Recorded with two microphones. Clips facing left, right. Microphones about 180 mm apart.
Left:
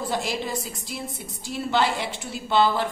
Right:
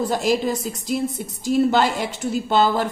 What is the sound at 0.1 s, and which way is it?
A woman's voice, 45° right (ahead or behind).